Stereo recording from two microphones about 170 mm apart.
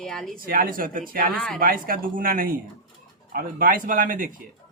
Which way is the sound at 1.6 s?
55° right (ahead or behind).